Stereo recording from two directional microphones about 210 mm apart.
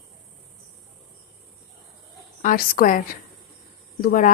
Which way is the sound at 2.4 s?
40° left (ahead or behind).